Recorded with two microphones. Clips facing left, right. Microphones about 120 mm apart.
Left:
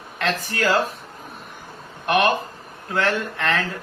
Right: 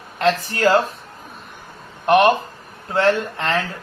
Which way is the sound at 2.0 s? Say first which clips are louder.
Right 5 dB; 30° right (ahead or behind).